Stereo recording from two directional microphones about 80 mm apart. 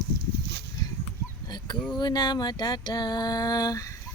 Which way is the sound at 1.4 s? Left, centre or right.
Left.